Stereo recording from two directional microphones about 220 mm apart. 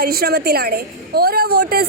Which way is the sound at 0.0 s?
45° right (ahead or behind).